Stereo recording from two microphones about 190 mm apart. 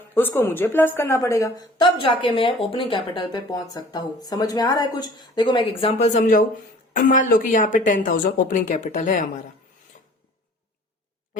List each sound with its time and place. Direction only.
0.1 s a woman's voice: 10° left (ahead or behind); by 9.4 s 40° left (ahead or behind)